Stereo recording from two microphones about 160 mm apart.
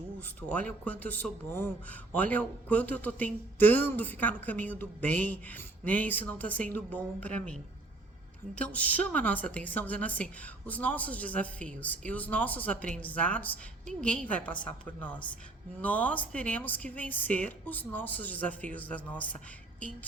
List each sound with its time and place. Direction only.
0.4 s speech: 10° left (ahead or behind)